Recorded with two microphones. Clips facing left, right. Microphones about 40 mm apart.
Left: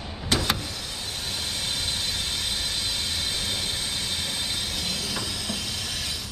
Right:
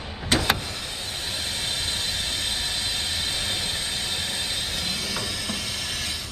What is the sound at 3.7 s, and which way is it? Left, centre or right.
Train, centre.